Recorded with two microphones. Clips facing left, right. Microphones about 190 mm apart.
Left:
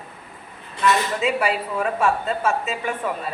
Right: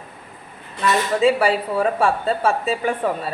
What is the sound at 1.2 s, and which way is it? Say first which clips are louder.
Speech: right 5 dB; 30° right (ahead or behind).